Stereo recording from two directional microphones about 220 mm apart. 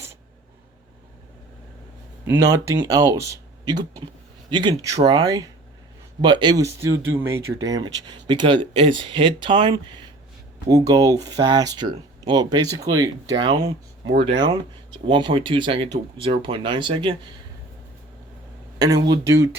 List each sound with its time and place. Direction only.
2.2 s speech: 10° right (ahead or behind)
15.0 s speech: 20° right (ahead or behind)
19.0 s speech: 15° right (ahead or behind)